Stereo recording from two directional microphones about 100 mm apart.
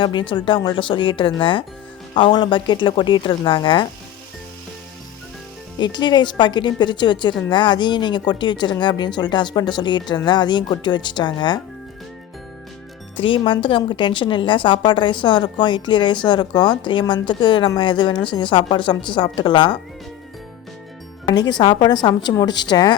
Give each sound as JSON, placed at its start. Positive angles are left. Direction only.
{"t": 0.0, "sound": "a woman's voice", "side_deg": 55}
{"t": 5.8, "sound": "a woman's voice", "side_deg": 50}
{"t": 13.1, "sound": "a woman's voice", "side_deg": 60}
{"t": 21.2, "sound": "a woman's voice", "side_deg": 45}